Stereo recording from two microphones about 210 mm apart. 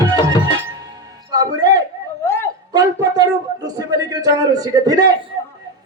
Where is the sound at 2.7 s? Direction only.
20° right (ahead or behind).